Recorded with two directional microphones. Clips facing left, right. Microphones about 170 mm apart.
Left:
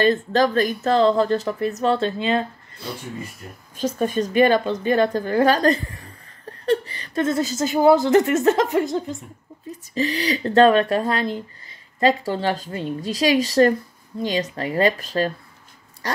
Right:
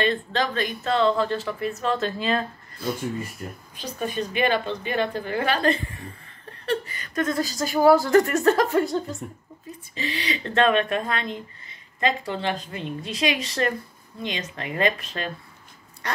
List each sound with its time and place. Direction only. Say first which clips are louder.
0.0 s speech: left 6 dB; 40° left (ahead or behind); by 2.4 s 25° left (ahead or behind)
3.7 s a woman's voice: left 8 dB; 45° left (ahead or behind); by 9.1 s 20° left (ahead or behind)
9.9 s speech: left 7 dB; 40° left (ahead or behind)